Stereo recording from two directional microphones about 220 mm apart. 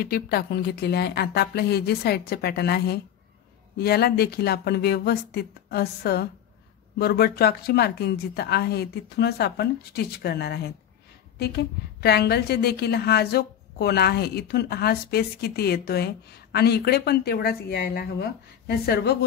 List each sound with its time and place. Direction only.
0.0 s a woman's voice: 45° left (ahead or behind)